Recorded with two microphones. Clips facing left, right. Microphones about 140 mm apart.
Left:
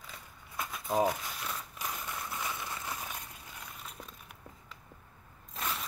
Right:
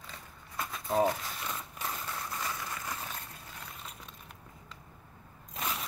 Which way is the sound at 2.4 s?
20° left (ahead or behind).